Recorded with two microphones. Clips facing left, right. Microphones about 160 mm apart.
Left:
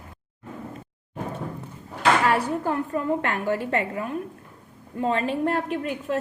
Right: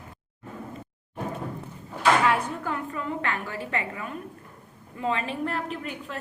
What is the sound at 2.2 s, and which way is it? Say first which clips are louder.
A woman's voice: left 3 dB; 45° left (ahead or behind).